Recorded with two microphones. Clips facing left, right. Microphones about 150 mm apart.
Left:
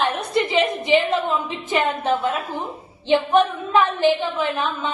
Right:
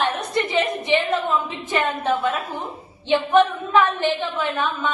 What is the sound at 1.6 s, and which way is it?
A woman's voice, 15° left (ahead or behind).